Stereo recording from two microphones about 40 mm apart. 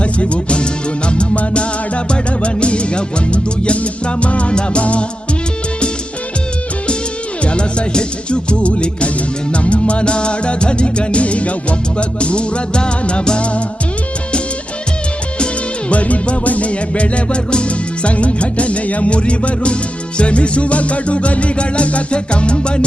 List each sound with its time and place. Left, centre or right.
0.0 s music: left
7.4 s music: left
15.9 s music: left